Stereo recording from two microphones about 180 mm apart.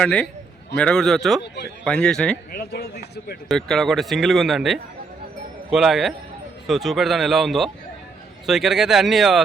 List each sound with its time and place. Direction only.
0.0 s speech: 5° left (ahead or behind)
2.5 s speech: 60° left (ahead or behind)
3.5 s speech: centre (ahead or behind)